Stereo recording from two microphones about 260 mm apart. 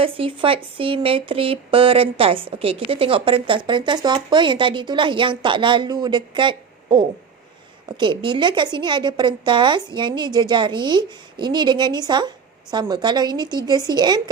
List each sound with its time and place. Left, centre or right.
0.0 s a woman's voice: right